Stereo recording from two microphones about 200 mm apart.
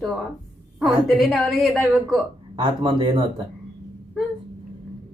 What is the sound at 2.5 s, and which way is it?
Speech, 25° right (ahead or behind).